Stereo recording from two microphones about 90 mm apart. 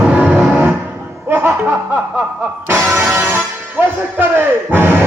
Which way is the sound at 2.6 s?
25° right (ahead or behind).